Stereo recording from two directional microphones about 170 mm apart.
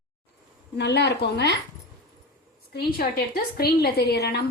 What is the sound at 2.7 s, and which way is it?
A woman's voice, 65° left (ahead or behind).